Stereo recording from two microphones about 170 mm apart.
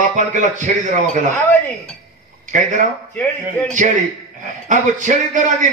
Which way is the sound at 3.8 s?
50° right (ahead or behind).